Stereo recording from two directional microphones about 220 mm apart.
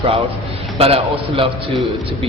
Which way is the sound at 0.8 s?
25° right (ahead or behind).